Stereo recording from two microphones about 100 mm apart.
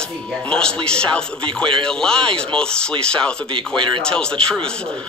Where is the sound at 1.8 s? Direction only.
5° left (ahead or behind).